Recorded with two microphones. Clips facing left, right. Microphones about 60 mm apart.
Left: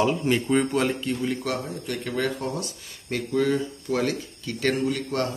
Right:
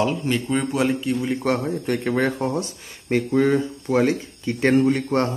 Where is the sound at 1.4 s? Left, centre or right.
Right.